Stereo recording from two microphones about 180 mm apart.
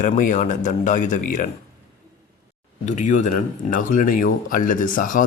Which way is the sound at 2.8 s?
45° left (ahead or behind).